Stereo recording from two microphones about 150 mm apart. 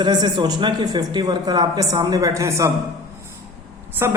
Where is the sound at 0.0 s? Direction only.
30° right (ahead or behind).